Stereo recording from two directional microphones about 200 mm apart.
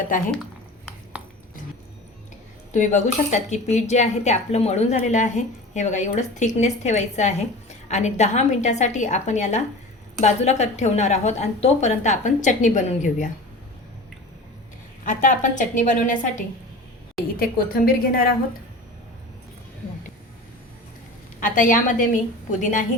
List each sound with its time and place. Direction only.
2.7 s speech: 35° left (ahead or behind)
15.0 s a woman's voice: 40° left (ahead or behind)
21.4 s speech: 40° left (ahead or behind)